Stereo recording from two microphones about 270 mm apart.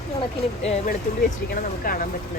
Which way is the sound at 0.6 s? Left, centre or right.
Left.